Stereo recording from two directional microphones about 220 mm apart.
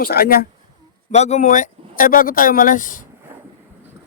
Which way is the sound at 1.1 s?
30° left (ahead or behind).